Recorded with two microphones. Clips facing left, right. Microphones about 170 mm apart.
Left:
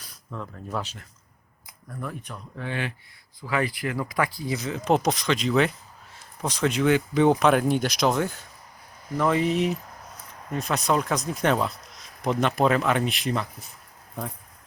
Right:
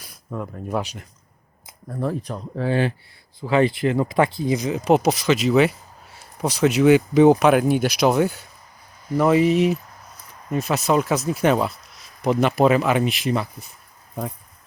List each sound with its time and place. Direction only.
0.3 s speech: 20° right (ahead or behind)
1.9 s speech: 35° right (ahead or behind); by 13.7 s 5° right (ahead or behind)